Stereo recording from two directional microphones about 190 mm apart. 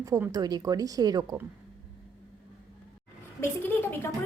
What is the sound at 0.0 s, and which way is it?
A woman's voice, 20° right (ahead or behind).